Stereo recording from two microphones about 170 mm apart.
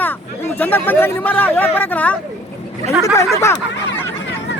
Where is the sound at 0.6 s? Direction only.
10° left (ahead or behind).